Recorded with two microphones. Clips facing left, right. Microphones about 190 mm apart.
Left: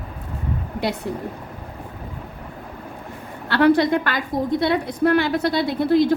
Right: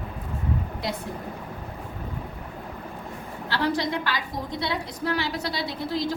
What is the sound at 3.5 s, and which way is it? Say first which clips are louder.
A woman's voice: left 10 dB; 60° left (ahead or behind).